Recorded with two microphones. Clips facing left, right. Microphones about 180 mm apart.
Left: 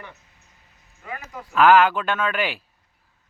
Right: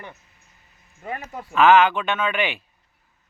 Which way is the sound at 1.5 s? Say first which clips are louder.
Even; 5° left (ahead or behind).